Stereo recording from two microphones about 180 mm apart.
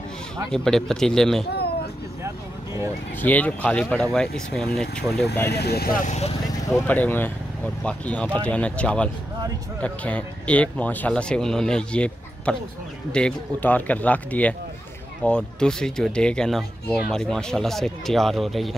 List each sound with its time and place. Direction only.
0.5 s speech: 5° left (ahead or behind)
3.2 s a man's voice: 10° left (ahead or behind)
5.5 s speech: 65° left (ahead or behind)
6.0 s speech: 35° left (ahead or behind)
6.7 s a man's voice: 10° left (ahead or behind)